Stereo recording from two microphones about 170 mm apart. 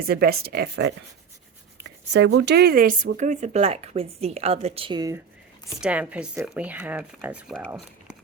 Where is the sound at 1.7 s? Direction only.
90° right; by 5.2 s 20° right (ahead or behind).